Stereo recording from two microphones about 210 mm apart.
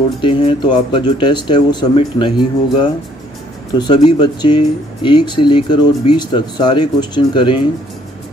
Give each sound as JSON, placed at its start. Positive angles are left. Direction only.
{"t": 0.2, "sound": "speech", "side_deg": 25}